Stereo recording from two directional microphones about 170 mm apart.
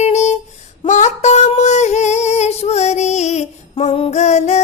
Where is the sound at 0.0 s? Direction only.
40° left (ahead or behind).